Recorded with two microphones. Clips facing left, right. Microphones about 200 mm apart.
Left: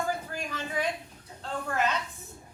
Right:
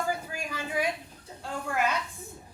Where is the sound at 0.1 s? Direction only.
10° right (ahead or behind).